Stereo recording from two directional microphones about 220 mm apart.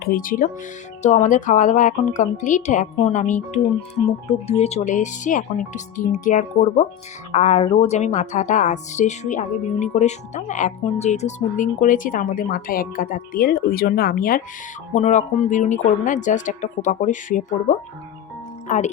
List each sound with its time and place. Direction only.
0.0 s speech: 40° left (ahead or behind)